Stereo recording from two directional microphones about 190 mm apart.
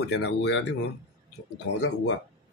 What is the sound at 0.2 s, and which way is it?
Speech, 65° left (ahead or behind).